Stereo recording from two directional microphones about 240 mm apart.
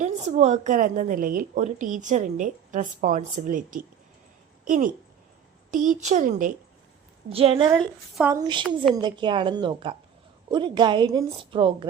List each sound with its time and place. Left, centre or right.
0.0 s a woman's voice: right
7.8 s a woman's voice: centre
8.3 s a woman's voice: centre